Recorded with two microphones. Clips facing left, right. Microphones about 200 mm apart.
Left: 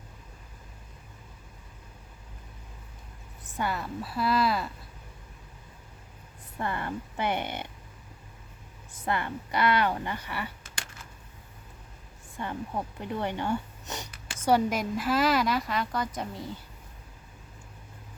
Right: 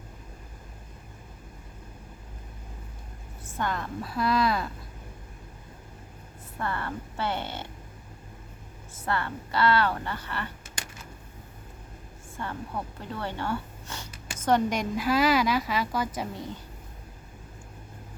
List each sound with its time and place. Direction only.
3.6 s speech: 5° left (ahead or behind)
6.6 s a woman's voice: 15° left (ahead or behind)
9.0 s a woman's voice: 15° left (ahead or behind)
12.4 s speech: 15° left (ahead or behind); by 16.5 s centre (ahead or behind)